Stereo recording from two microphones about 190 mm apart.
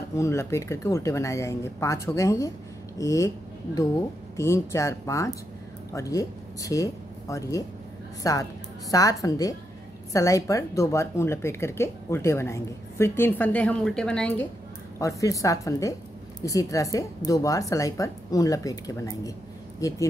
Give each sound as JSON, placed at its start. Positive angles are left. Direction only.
{"t": 0.1, "sound": "speech", "side_deg": 15}
{"t": 4.4, "sound": "speech", "side_deg": 15}
{"t": 15.0, "sound": "speech", "side_deg": 15}